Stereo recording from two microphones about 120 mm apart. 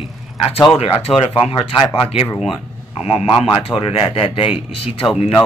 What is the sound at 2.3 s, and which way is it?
Speech, centre (ahead or behind).